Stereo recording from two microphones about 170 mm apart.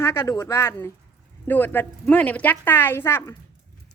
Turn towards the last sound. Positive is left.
turn(degrees=15)  # may be behind; listen again after turning